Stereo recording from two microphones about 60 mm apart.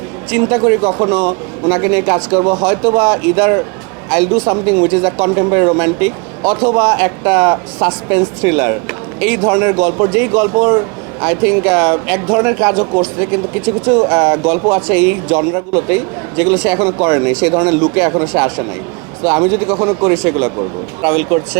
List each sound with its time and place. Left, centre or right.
0.3 s speech: right